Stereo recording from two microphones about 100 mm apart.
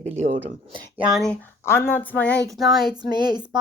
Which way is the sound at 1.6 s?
25° left (ahead or behind).